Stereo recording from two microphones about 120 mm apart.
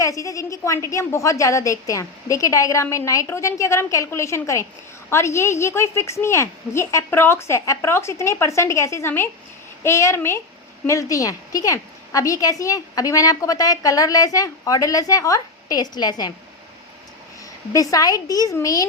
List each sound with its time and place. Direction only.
0.0 s a woman's voice: 25° left (ahead or behind)
17.7 s a woman's voice: 30° left (ahead or behind)